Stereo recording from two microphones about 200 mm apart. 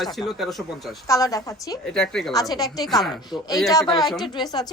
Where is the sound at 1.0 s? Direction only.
15° left (ahead or behind).